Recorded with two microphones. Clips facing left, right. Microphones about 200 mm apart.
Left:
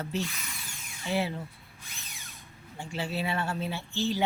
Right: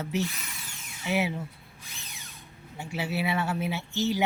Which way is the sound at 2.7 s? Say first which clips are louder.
Right 2 dB; 10° right (ahead or behind).